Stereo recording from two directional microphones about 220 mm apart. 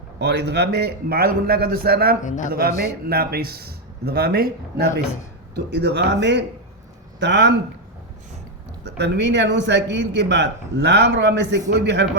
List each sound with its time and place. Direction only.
0.2 s a man's voice: 50° right (ahead or behind)
2.2 s a man's voice: 35° left (ahead or behind)
2.5 s a man's voice: 45° right (ahead or behind)
9.0 s a man's voice: 50° right (ahead or behind)